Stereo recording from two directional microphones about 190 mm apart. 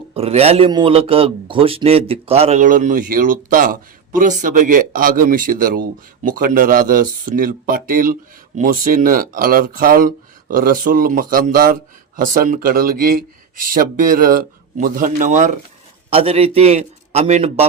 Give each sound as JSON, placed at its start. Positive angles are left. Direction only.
{"t": 0.1, "sound": "a man's voice", "side_deg": -30}